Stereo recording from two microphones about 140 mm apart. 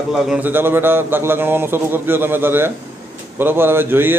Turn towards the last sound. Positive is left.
turn(degrees=-15)  # may be behind; listen again after turning